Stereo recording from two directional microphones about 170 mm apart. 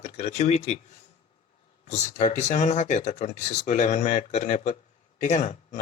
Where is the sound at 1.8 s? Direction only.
40° left (ahead or behind).